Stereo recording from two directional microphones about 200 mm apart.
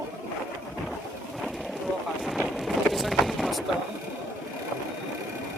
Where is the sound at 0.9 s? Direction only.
Centre (ahead or behind).